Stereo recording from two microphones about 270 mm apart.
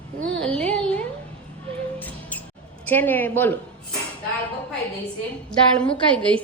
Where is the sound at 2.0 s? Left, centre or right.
Centre.